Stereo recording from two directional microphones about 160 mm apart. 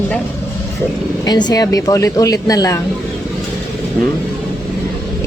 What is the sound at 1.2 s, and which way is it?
A woman's voice, 25° left (ahead or behind).